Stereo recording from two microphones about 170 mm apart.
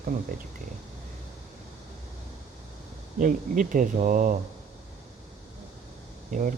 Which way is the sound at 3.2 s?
50° right (ahead or behind).